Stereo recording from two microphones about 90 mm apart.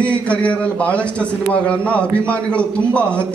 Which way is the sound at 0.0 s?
15° left (ahead or behind).